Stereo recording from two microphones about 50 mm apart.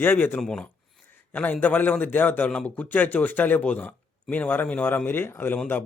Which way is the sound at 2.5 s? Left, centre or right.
Left.